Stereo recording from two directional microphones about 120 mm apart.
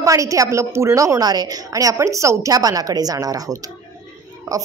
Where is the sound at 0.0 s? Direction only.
25° right (ahead or behind).